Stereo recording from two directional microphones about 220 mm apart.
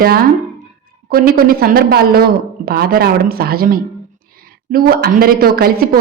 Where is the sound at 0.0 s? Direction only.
45° right (ahead or behind).